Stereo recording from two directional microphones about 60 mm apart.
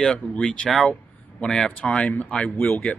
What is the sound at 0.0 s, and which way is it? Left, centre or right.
Speech, centre.